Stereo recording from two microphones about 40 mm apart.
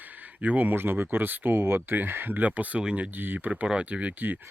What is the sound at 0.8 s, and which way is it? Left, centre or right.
Speech, right.